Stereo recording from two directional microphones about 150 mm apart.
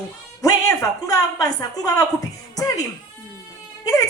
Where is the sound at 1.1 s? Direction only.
25° left (ahead or behind).